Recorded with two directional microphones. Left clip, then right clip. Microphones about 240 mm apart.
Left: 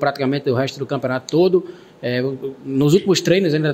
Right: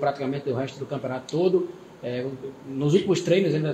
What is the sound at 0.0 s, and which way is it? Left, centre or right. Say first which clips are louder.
Speech: left 7 dB; left.